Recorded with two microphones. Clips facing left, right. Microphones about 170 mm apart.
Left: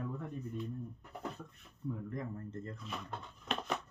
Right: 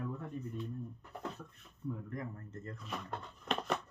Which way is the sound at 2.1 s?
25° left (ahead or behind).